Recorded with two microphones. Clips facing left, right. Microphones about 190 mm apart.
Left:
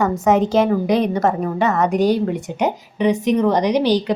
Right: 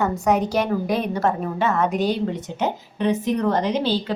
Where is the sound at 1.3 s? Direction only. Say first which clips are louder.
Left 3 dB; 70° left (ahead or behind).